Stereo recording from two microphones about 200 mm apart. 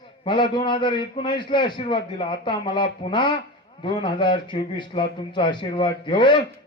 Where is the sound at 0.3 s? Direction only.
25° left (ahead or behind).